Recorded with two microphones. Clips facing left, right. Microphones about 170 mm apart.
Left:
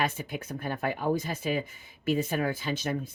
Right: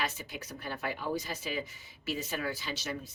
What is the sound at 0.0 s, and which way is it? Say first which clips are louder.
Speech: left 6 dB; 55° left (ahead or behind).